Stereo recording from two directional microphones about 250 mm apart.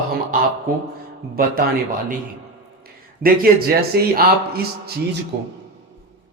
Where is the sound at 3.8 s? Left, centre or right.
Right.